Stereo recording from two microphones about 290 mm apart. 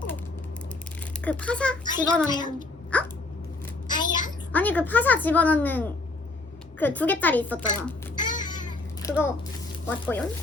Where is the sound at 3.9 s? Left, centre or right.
Centre.